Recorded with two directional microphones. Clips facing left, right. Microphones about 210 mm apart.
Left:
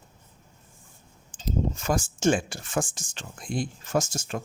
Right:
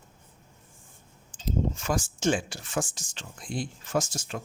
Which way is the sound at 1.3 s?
45° left (ahead or behind).